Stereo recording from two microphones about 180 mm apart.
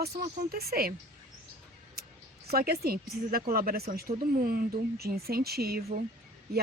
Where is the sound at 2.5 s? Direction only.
60° right (ahead or behind).